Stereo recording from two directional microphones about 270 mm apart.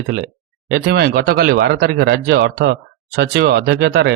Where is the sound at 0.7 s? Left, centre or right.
Right.